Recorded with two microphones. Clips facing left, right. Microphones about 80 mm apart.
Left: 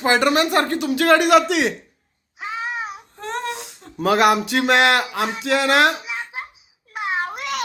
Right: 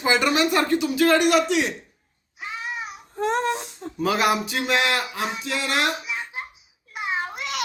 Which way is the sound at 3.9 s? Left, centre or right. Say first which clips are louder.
Left 5 dB; left.